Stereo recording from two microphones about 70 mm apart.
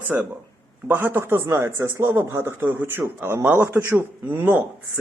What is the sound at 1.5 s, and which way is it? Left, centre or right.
Speech, right.